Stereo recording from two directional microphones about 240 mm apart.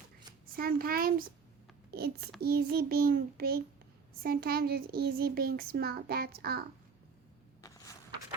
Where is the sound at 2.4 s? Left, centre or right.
Right.